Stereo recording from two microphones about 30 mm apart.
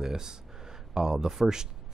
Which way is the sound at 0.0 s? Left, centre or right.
Centre.